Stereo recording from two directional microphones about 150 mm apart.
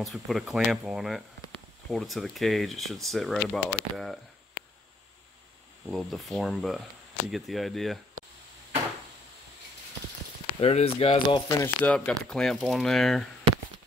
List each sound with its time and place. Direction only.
0.0 s speech: centre (ahead or behind)
5.9 s speech: centre (ahead or behind)
10.6 s speech: 40° left (ahead or behind)
11.4 s speech: 25° left (ahead or behind)
11.8 s speech: 5° left (ahead or behind)